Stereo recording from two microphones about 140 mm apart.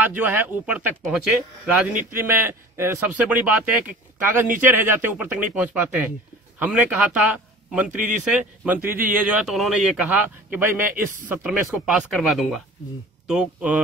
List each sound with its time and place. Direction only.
0.0 s a man's voice: 15° right (ahead or behind)